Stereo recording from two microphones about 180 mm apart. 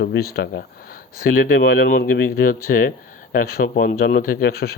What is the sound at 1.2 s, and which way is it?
Speech, 50° left (ahead or behind).